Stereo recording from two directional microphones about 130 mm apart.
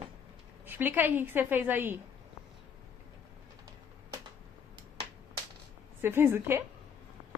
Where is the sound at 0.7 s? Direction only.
15° right (ahead or behind).